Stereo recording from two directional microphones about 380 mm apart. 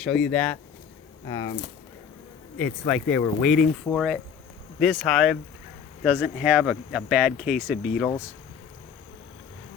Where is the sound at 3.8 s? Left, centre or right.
Centre.